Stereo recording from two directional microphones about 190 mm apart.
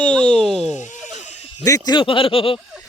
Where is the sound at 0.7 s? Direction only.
40° left (ahead or behind).